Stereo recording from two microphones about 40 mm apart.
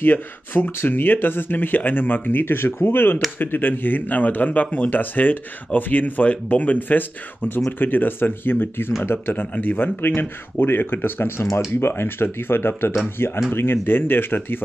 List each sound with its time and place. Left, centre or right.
0.0 s speech: left
3.3 s speech: left